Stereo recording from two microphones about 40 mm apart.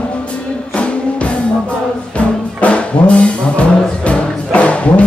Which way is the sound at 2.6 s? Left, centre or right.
Left.